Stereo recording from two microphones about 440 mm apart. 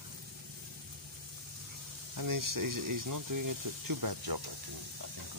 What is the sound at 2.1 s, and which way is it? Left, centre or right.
Speech, right.